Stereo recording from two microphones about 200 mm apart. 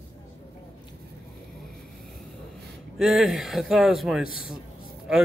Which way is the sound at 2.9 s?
Centre (ahead or behind).